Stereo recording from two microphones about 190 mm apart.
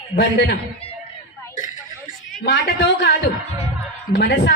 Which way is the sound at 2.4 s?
65° left (ahead or behind).